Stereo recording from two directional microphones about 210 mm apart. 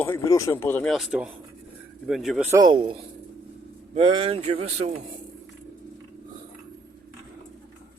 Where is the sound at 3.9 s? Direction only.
25° right (ahead or behind).